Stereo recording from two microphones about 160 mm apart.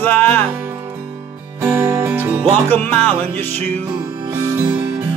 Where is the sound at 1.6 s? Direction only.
15° right (ahead or behind).